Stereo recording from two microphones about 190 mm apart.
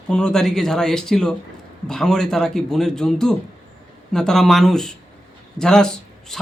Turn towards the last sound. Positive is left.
turn(degrees=5)  # may be behind; listen again after turning